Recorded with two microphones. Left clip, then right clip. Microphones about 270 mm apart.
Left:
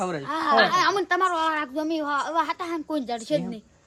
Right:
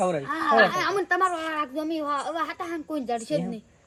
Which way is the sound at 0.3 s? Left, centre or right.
Left.